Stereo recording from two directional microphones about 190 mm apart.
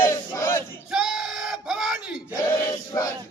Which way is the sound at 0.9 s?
Centre (ahead or behind).